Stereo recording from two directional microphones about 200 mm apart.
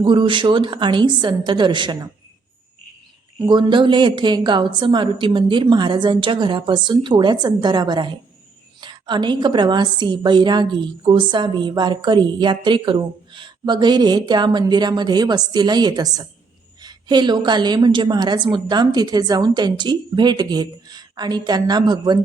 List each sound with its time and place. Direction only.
0.0 s a woman's voice: 25° right (ahead or behind)
3.3 s a woman's voice: 25° right (ahead or behind)